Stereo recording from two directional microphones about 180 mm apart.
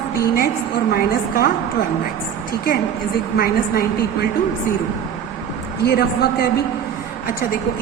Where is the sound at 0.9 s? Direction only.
55° left (ahead or behind).